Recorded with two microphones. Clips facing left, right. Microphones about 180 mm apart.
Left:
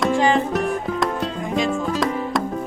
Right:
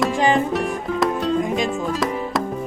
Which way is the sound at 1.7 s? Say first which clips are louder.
Left 1 dB; centre (ahead or behind).